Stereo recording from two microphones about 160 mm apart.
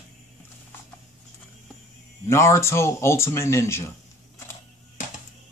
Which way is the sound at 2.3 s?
15° left (ahead or behind).